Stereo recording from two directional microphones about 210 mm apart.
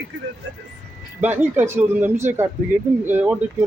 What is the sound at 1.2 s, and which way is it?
Speech, 10° right (ahead or behind).